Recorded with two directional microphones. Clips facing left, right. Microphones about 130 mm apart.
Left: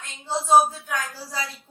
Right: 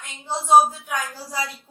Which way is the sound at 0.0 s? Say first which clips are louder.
Left 1 dB; 15° right (ahead or behind).